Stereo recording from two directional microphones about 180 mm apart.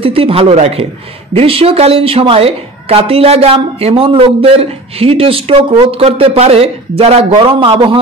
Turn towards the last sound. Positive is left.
turn(degrees=-30)  # may be behind; listen again after turning